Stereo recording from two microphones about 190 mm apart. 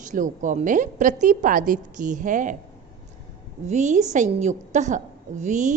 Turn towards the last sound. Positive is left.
turn(degrees=-40)  # may be behind; listen again after turning